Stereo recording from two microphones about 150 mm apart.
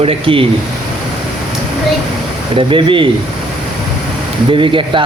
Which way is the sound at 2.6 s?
35° right (ahead or behind).